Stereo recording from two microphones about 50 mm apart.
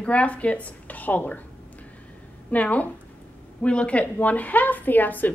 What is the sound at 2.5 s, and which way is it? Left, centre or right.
A woman's voice, left.